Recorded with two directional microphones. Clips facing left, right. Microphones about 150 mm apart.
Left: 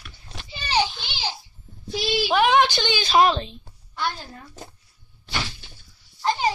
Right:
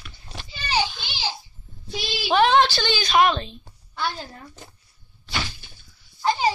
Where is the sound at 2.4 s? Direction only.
15° left (ahead or behind).